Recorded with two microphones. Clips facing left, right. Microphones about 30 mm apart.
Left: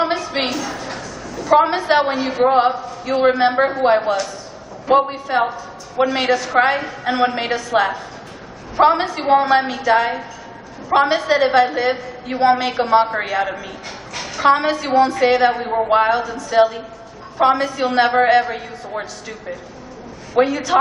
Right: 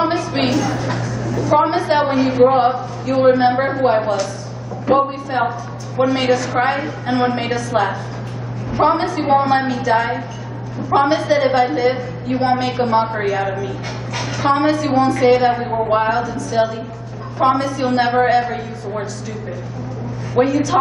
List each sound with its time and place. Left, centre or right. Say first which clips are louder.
0.0 s a sound: right 2 dB; centre
1.4 s a woman's voice: left 1 dB; centre
2.1 s a woman's voice: right 5 dB; centre
2.4 s a woman's voice: even; centre
14.1 s a sound: right 3 dB; centre
14.7 s a woman's voice: even; centre
20.3 s a woman's voice: right 1 dB; centre